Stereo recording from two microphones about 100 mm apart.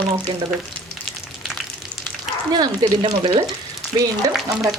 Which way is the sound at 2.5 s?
45° right (ahead or behind).